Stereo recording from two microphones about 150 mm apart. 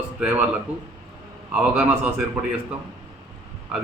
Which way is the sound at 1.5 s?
10° right (ahead or behind).